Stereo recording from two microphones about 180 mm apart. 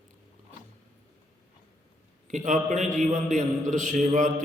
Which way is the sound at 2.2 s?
40° right (ahead or behind).